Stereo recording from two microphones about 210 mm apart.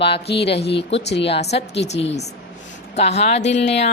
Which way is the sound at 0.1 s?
50° left (ahead or behind).